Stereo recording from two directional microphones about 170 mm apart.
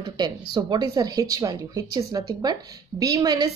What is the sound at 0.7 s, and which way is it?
A woman's voice, 25° right (ahead or behind).